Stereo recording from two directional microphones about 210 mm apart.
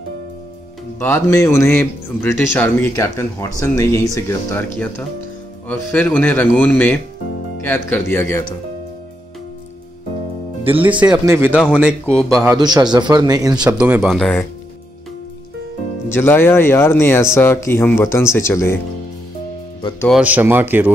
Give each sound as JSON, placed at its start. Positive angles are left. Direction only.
{"t": 0.9, "sound": "a man's voice", "side_deg": 10}
{"t": 5.7, "sound": "a man's voice", "side_deg": 10}
{"t": 10.8, "sound": "speech", "side_deg": -5}
{"t": 12.5, "sound": "speech", "side_deg": -20}
{"t": 16.1, "sound": "a man's voice", "side_deg": 10}
{"t": 20.1, "sound": "speech", "side_deg": -5}